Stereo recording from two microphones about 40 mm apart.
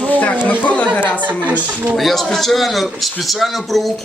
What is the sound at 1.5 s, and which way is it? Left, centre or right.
Speech, right.